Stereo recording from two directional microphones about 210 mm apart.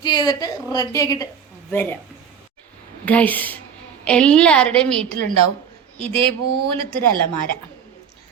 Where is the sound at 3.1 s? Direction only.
5° left (ahead or behind).